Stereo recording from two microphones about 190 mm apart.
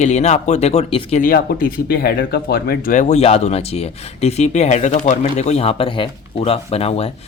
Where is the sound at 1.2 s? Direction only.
50° left (ahead or behind).